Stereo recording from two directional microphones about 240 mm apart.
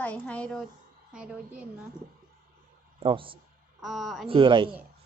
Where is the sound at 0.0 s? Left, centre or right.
Centre.